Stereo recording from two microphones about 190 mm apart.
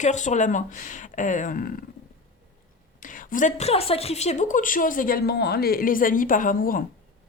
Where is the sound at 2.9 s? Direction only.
45° left (ahead or behind).